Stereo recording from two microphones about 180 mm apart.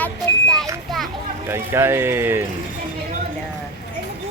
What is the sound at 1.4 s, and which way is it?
Speech, 15° right (ahead or behind).